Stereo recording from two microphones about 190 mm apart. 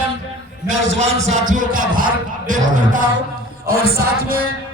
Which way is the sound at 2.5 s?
45° right (ahead or behind).